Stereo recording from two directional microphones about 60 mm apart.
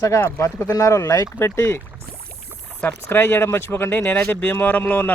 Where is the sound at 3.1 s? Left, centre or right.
Left.